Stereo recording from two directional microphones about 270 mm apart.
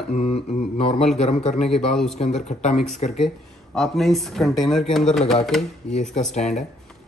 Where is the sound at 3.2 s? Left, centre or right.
Centre.